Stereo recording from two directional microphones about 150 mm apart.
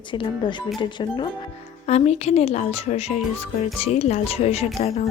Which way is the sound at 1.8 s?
45° left (ahead or behind).